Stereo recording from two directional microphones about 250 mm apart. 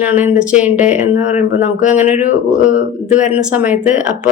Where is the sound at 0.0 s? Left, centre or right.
Centre.